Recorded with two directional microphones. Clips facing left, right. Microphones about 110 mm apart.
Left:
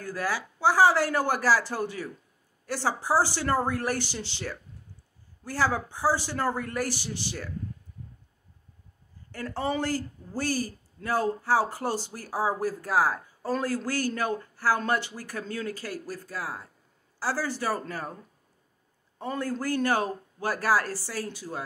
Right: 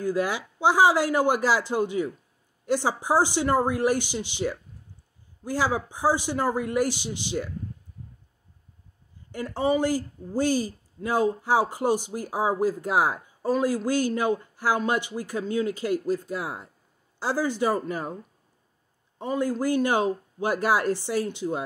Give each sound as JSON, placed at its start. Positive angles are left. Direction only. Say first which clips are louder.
{"t": 0.0, "sound": "speech", "louder": "right 5 dB", "side_deg": -20}
{"t": 9.3, "sound": "speech", "louder": "right 5 dB", "side_deg": -15}
{"t": 19.1, "sound": "speech", "louder": "right 5 dB", "side_deg": -15}